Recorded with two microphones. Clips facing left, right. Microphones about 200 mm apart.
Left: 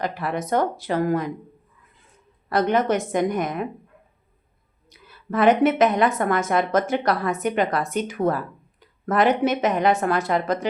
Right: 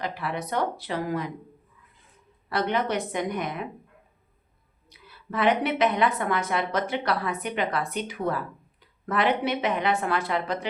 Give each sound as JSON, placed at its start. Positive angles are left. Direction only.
{"t": 0.0, "sound": "a woman's voice", "side_deg": 45}
{"t": 2.5, "sound": "a woman's voice", "side_deg": 45}
{"t": 4.9, "sound": "a woman's voice", "side_deg": 45}